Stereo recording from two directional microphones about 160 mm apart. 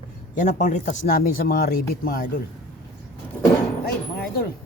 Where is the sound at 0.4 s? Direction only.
50° left (ahead or behind); by 2.2 s 65° left (ahead or behind).